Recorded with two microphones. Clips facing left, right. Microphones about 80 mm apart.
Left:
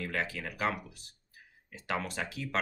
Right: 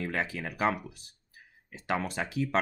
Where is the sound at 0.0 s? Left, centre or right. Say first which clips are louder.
Right 2 dB; centre.